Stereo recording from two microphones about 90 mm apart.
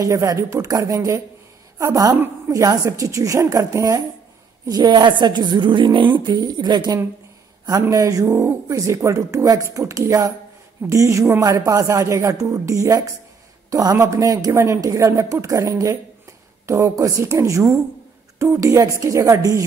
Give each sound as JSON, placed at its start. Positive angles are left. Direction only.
{"t": 0.0, "sound": "speech", "side_deg": -40}
{"t": 4.6, "sound": "a woman's voice", "side_deg": -50}
{"t": 7.9, "sound": "a man's voice", "side_deg": -40}